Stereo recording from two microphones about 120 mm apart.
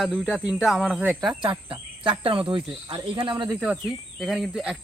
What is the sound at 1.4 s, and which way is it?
Speech, 45° right (ahead or behind).